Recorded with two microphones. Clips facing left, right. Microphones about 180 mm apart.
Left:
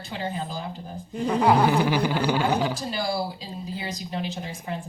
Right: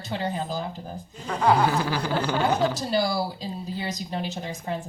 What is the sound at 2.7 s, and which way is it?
A woman's voice, 40° right (ahead or behind).